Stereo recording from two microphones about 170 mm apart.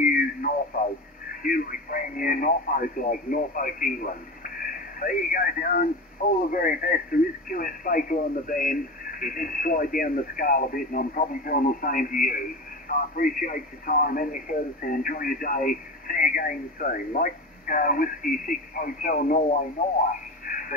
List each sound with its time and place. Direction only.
0.0 s radio: 55° left (ahead or behind)
1.4 s speech: 55° left (ahead or behind)
20.4 s radio: 55° left (ahead or behind)